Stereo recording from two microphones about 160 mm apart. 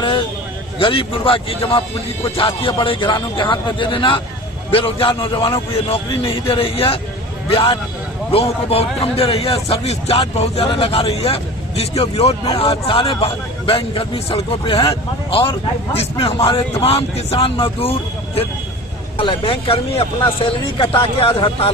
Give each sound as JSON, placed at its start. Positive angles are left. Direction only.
{"t": 0.7, "sound": "a man's voice", "side_deg": 35}